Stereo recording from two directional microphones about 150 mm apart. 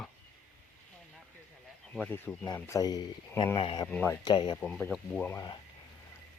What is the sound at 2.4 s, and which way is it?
Speech, 25° left (ahead or behind).